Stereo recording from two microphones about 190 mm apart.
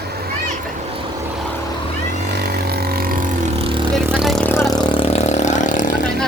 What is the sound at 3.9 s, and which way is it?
Vehicle, centre (ahead or behind).